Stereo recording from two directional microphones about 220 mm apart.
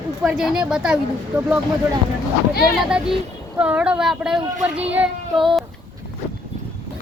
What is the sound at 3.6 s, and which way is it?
Speech, 5° right (ahead or behind).